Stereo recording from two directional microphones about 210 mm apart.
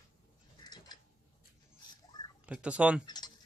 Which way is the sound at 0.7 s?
20° left (ahead or behind).